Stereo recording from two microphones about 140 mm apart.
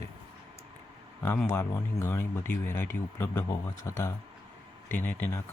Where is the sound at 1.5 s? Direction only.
20° left (ahead or behind).